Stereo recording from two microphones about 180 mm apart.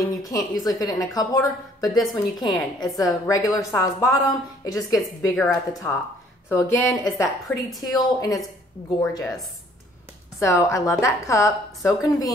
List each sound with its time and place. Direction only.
0.0 s a woman's voice: 20° left (ahead or behind)
7.4 s a woman's voice: centre (ahead or behind)
7.9 s speech: 20° left (ahead or behind)
10.4 s a woman's voice: 15° left (ahead or behind)